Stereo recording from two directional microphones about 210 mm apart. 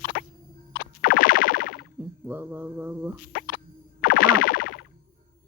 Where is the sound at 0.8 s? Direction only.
45° left (ahead or behind).